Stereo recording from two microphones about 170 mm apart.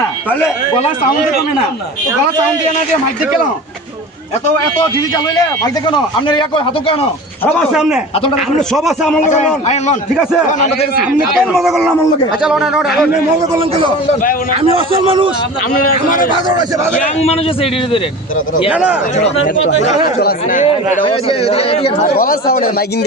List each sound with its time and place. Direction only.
0.3 s speech: 10° left (ahead or behind)
5.8 s a man's voice: 30° left (ahead or behind)
7.4 s speech: 5° left (ahead or behind)
9.2 s speech: 45° left (ahead or behind)
11.3 s speech: centre (ahead or behind)
13.5 s a man's voice: 30° right (ahead or behind)
14.1 s speech: 50° left (ahead or behind)
14.8 s a man's voice: 30° right (ahead or behind)
16.3 s a man's voice: 25° right (ahead or behind)
17.2 s speech: 35° left (ahead or behind)
18.7 s speech: 10° right (ahead or behind)
20.1 s speech: 60° left (ahead or behind)
21.0 s speech: 35° left (ahead or behind)
22.0 s speech: 60° left (ahead or behind)